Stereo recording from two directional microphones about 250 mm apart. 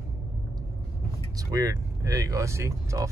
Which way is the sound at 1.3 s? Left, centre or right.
Centre.